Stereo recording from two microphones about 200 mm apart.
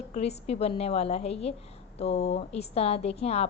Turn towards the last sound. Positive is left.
turn(degrees=30)  # may be behind; listen again after turning